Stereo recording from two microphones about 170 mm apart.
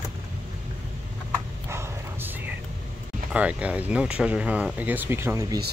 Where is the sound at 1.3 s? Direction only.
15° right (ahead or behind).